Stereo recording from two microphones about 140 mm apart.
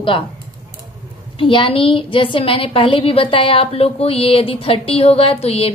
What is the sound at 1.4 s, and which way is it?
A woman's voice, 40° left (ahead or behind).